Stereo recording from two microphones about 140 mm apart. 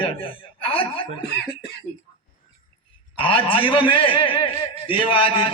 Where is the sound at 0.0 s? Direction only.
40° left (ahead or behind).